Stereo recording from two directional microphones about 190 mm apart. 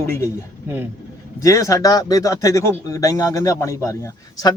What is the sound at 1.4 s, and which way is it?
Speech, 15° left (ahead or behind).